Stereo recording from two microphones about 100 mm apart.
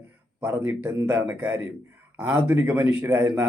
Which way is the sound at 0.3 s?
20° right (ahead or behind).